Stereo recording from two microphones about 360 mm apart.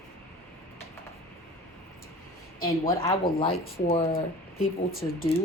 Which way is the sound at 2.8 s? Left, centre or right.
Centre.